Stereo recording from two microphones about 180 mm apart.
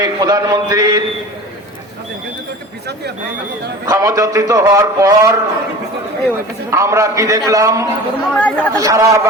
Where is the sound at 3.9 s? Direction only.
15° right (ahead or behind).